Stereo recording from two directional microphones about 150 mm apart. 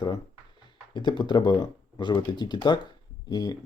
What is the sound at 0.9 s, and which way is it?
Speech, 30° left (ahead or behind).